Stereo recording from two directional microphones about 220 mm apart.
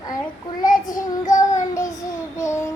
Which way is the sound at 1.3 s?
35° left (ahead or behind).